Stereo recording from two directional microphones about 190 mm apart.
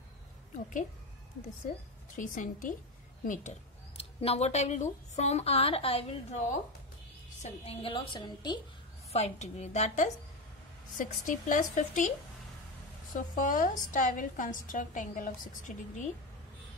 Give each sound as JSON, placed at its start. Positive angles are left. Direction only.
{"t": 2.1, "sound": "a woman's voice", "side_deg": 45}
{"t": 9.1, "sound": "speech", "side_deg": 35}
{"t": 13.1, "sound": "a woman's voice", "side_deg": 45}